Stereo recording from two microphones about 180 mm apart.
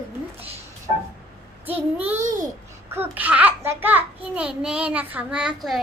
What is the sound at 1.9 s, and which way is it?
A child's voice, 10° right (ahead or behind).